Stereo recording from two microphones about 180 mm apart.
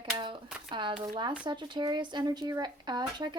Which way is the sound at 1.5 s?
25° right (ahead or behind).